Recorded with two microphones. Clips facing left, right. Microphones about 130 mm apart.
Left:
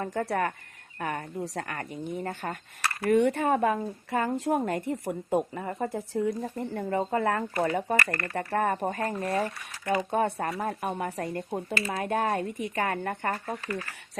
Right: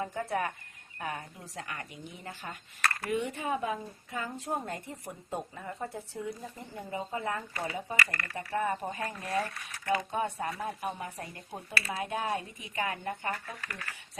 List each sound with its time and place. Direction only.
0.0 s speech: 70° left (ahead or behind); by 2.6 s 45° left (ahead or behind)
3.1 s speech: 60° left (ahead or behind)
9.4 s speech: 15° left (ahead or behind)
10.1 s speech: 60° left (ahead or behind)
11.9 s speech: 50° left (ahead or behind)